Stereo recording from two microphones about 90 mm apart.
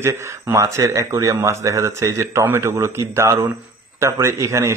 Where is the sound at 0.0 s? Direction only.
35° right (ahead or behind).